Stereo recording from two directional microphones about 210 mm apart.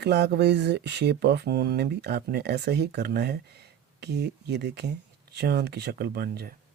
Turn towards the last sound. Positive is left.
turn(degrees=-50)  # may be behind; listen again after turning